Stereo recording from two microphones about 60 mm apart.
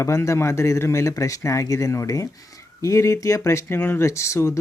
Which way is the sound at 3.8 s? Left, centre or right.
Left.